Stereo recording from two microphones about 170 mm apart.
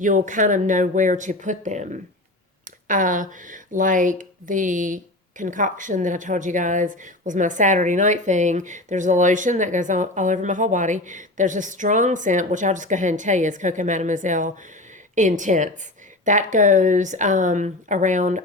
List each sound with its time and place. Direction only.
0.0 s speech: 50° right (ahead or behind)